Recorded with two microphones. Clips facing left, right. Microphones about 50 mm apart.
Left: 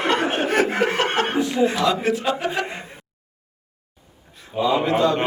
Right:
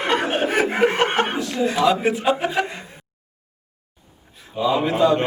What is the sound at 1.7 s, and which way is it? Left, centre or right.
Speech, centre.